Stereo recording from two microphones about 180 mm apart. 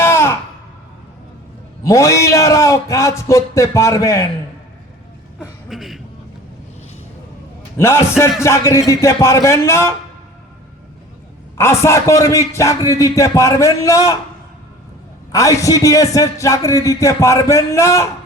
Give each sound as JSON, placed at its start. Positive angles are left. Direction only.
{"t": 0.0, "sound": "a sound", "side_deg": 15}
{"t": 1.8, "sound": "a man's voice", "side_deg": 15}
{"t": 5.4, "sound": "a sound", "side_deg": 0}
{"t": 7.8, "sound": "a man's voice", "side_deg": 15}
{"t": 11.5, "sound": "a man's voice", "side_deg": 15}
{"t": 15.3, "sound": "a man's voice", "side_deg": 20}